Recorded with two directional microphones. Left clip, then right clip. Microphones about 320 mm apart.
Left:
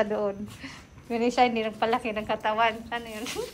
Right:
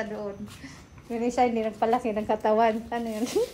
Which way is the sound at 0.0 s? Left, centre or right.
Centre.